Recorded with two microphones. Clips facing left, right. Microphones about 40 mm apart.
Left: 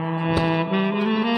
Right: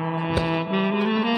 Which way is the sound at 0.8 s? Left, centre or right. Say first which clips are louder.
Left 1 dB; centre.